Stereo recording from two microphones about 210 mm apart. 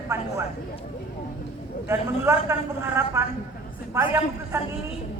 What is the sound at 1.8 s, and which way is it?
A woman's voice, 10° right (ahead or behind).